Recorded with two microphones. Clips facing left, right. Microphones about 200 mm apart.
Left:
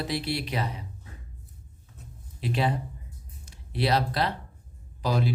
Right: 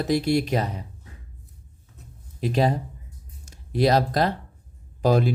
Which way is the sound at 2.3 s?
45° right (ahead or behind).